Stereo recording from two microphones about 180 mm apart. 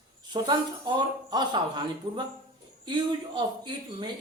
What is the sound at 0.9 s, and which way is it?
Speech, 25° right (ahead or behind).